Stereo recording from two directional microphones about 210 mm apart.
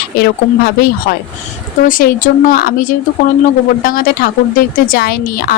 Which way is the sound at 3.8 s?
40° left (ahead or behind).